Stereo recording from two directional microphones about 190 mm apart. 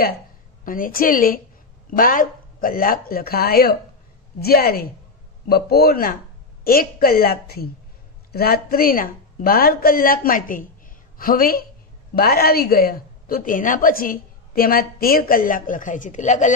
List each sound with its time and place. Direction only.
0.7 s a woman's voice: 45° left (ahead or behind)